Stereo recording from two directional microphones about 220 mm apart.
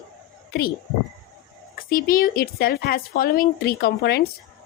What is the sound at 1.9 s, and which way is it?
Speech, 40° left (ahead or behind).